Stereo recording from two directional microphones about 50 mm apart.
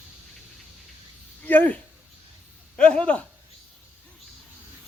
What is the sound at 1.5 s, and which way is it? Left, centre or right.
Speech, left.